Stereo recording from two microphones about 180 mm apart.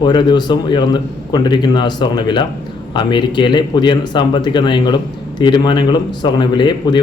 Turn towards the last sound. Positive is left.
turn(degrees=25)  # may be behind; listen again after turning